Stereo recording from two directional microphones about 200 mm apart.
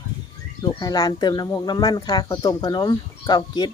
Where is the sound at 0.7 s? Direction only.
20° left (ahead or behind).